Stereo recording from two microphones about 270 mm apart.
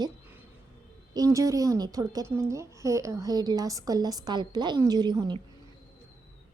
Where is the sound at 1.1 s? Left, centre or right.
Centre.